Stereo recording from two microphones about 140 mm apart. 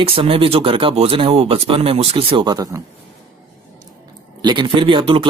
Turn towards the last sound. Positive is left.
turn(degrees=-40)  # may be behind; listen again after turning